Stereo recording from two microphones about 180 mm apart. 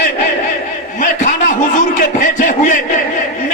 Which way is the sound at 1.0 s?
45° left (ahead or behind).